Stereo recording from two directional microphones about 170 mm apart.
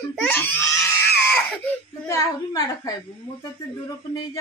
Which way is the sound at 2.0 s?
20° left (ahead or behind).